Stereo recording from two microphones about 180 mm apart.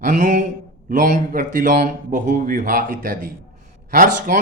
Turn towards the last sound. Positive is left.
turn(degrees=-50)  # may be behind; listen again after turning